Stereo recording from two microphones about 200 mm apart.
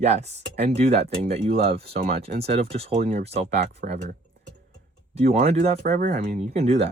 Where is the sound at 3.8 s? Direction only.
45° right (ahead or behind).